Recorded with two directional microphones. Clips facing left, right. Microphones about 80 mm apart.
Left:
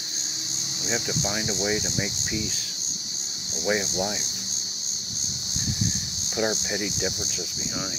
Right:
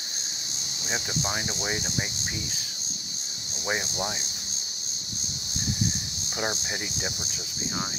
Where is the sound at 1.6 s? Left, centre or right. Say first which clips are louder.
Left 4 dB; right.